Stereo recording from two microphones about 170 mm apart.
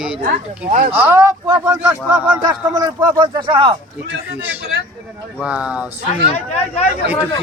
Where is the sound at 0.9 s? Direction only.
10° right (ahead or behind).